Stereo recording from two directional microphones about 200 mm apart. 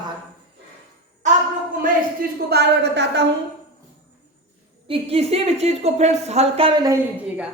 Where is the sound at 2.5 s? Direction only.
55° right (ahead or behind).